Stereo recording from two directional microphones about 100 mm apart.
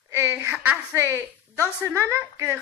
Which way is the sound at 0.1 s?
25° right (ahead or behind).